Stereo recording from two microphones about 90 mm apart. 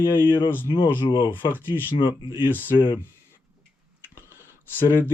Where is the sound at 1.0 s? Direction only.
60° left (ahead or behind).